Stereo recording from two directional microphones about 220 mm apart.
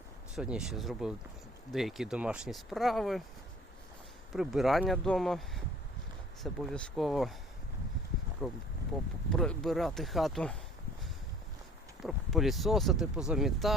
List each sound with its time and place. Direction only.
0.3 s speech: 5° right (ahead or behind)
4.3 s speech: centre (ahead or behind)
8.4 s speech: centre (ahead or behind)
12.0 s speech: centre (ahead or behind)